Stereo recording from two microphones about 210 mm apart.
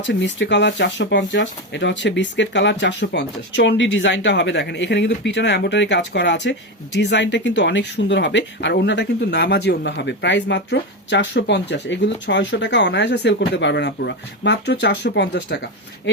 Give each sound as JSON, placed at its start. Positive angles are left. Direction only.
{"t": 0.0, "sound": "speech", "side_deg": 60}